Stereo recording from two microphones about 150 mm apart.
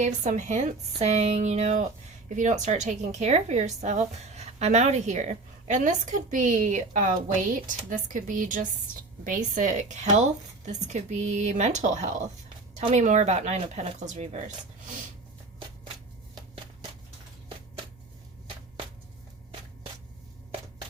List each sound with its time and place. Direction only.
0.0 s a woman's voice: 55° right (ahead or behind)